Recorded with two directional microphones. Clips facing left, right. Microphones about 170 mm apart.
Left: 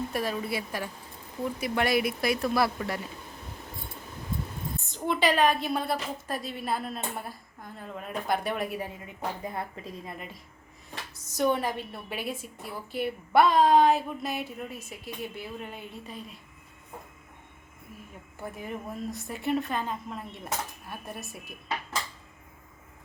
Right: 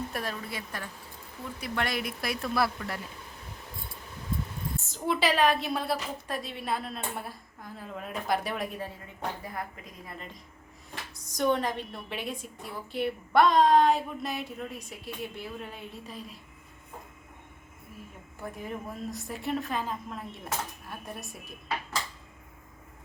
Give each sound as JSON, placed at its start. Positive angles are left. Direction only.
{"t": 0.1, "sound": "a woman's voice", "side_deg": 5}
{"t": 4.9, "sound": "a woman's voice", "side_deg": 0}
{"t": 9.4, "sound": "a woman's voice", "side_deg": 25}
{"t": 11.2, "sound": "a woman's voice", "side_deg": 5}
{"t": 18.4, "sound": "a woman's voice", "side_deg": 0}